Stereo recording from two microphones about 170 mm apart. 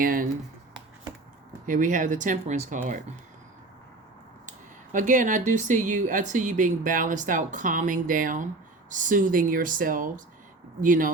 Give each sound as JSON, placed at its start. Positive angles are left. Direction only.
{"t": 0.0, "sound": "speech", "side_deg": -55}
{"t": 1.6, "sound": "a woman's voice", "side_deg": -50}
{"t": 4.9, "sound": "a woman's voice", "side_deg": -50}